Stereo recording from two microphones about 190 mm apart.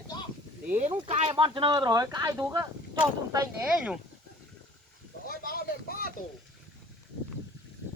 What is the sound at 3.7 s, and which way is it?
Speech, 5° right (ahead or behind).